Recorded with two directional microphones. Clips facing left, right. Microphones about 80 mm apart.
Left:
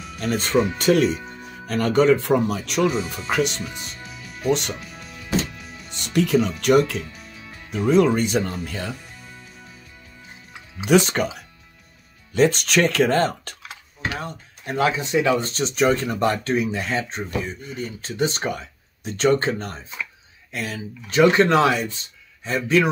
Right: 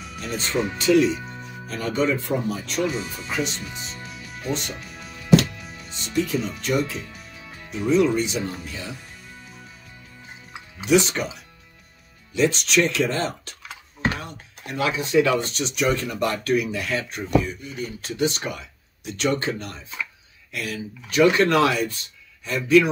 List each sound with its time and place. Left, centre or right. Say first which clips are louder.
0.2 s speech: left 5 dB; left
1.7 s speech: left 6 dB; left
3.3 s speech: left 5 dB; left
3.7 s music: even; centre
4.5 s speech: left 7 dB; left
4.7 s music: left 1 dB; centre
5.9 s speech: left 4 dB; left
7.7 s speech: left 2 dB; left
10.9 s speech: left 2 dB; left
14.2 s speech: left 5 dB; left
15.5 s speech: left 3 dB; left